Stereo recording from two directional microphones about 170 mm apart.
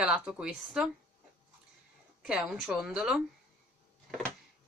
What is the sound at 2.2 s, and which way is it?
Speech, 5° right (ahead or behind).